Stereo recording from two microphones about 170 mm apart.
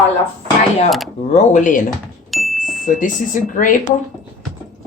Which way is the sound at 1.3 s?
45° left (ahead or behind).